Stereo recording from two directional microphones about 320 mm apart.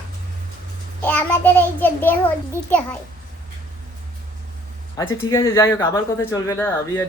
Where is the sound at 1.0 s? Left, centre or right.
Centre.